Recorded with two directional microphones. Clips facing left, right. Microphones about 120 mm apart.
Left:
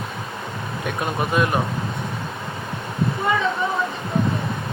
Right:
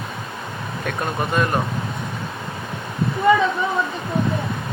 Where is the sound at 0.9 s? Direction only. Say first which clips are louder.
Even; 5° left (ahead or behind).